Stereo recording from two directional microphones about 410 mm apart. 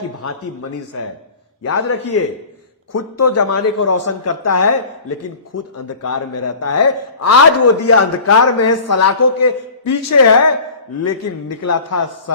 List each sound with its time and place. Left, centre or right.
0.2 s a man's voice: left